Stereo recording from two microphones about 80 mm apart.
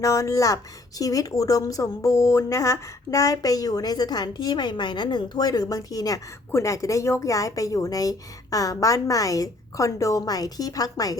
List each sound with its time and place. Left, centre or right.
0.0 s speech: left